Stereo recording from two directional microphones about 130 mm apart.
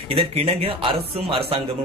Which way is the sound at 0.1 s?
50° right (ahead or behind).